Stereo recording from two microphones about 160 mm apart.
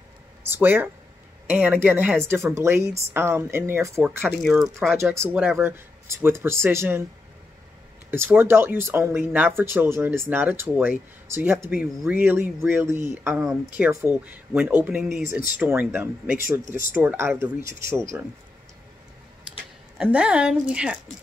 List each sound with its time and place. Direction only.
0.5 s speech: 15° right (ahead or behind)
4.4 s speech: centre (ahead or behind)
5.1 s speech: 15° right (ahead or behind)
8.1 s speech: 15° right (ahead or behind)
20.0 s speech: 5° right (ahead or behind)